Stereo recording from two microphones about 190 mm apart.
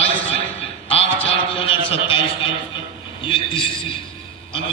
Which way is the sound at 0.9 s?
30° left (ahead or behind).